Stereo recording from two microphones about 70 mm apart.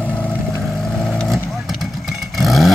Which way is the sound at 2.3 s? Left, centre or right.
Centre.